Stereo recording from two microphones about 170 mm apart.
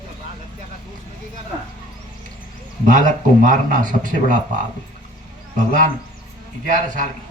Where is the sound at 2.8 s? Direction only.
50° right (ahead or behind).